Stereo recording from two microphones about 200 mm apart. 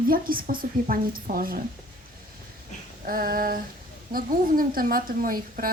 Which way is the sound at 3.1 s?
45° right (ahead or behind).